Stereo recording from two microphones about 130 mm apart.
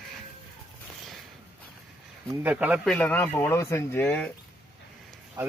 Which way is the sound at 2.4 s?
10° right (ahead or behind).